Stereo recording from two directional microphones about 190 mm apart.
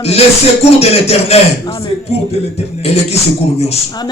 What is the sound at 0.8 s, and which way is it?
Music, 35° left (ahead or behind).